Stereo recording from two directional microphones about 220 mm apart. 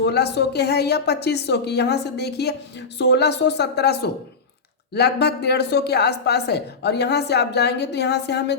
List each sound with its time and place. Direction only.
0.0 s a woman's voice: 50° left (ahead or behind)